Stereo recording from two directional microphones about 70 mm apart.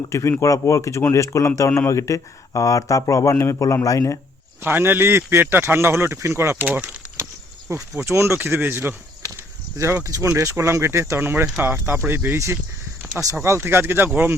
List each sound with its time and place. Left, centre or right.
0.1 s speech: left
4.6 s speech: right
6.6 s speech: right
7.7 s speech: right
9.2 s a sound: right
10.0 s speech: right
11.2 s speech: right
13.6 s speech: right